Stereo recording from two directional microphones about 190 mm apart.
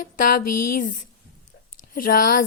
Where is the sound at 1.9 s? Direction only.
45° left (ahead or behind).